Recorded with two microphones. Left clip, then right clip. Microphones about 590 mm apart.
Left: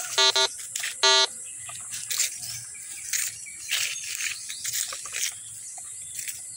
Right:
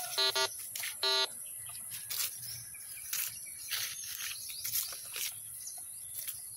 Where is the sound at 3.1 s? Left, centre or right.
Right.